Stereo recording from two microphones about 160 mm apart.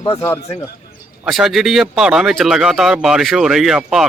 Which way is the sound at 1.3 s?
Centre (ahead or behind).